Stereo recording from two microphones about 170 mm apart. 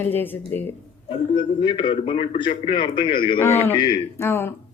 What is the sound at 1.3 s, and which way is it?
A man's voice, 30° left (ahead or behind).